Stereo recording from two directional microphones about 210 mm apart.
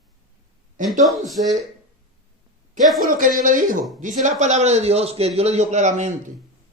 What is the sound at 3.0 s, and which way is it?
A man's voice, 40° right (ahead or behind).